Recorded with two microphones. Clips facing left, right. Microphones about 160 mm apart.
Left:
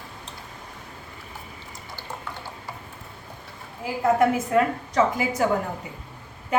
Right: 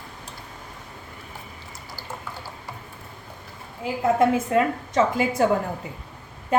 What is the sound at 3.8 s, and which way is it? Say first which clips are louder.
A woman's voice: even; 25° right (ahead or behind).